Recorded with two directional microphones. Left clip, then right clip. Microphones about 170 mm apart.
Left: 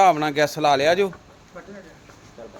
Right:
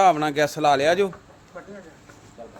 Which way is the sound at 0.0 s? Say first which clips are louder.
Left 1 dB; centre (ahead or behind).